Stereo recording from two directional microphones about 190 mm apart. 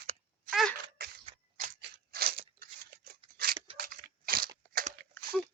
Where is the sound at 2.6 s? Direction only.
50° right (ahead or behind).